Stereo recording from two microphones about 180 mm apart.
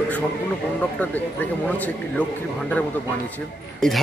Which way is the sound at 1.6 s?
10° left (ahead or behind).